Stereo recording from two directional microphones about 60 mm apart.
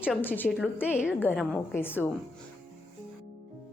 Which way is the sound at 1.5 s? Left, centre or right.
Left.